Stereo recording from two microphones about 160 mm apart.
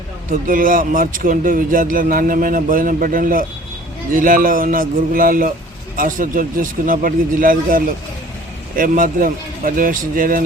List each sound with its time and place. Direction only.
0.3 s speech: 60° right (ahead or behind)